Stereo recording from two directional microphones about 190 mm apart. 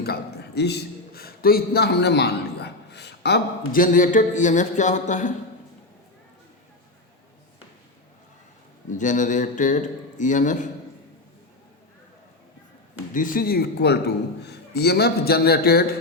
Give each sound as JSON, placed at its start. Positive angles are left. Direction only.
{"t": 0.0, "sound": "a man's voice", "side_deg": 60}
{"t": 8.9, "sound": "a man's voice", "side_deg": 40}
{"t": 13.1, "sound": "a man's voice", "side_deg": 45}